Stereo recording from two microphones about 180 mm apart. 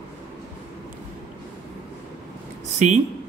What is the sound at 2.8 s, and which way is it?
Speech, 40° right (ahead or behind).